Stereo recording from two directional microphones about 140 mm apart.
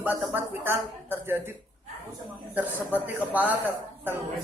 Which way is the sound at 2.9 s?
10° right (ahead or behind).